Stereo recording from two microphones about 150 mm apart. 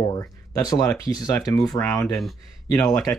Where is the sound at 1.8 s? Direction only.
10° left (ahead or behind).